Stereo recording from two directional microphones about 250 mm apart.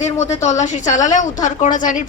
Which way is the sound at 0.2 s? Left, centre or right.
Left.